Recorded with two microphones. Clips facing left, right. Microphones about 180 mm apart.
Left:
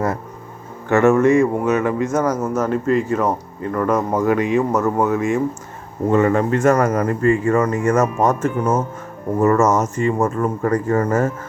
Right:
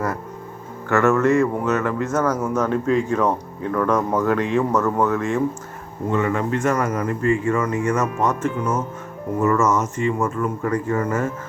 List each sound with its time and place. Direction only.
0.9 s speech: 15° left (ahead or behind)
6.1 s speech: 40° left (ahead or behind)